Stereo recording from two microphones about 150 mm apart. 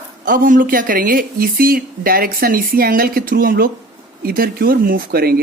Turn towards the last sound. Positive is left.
turn(degrees=-90)